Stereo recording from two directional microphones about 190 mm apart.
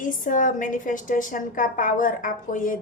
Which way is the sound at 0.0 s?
45° left (ahead or behind).